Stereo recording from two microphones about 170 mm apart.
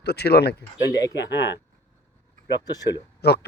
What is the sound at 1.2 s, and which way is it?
Speech, 90° left.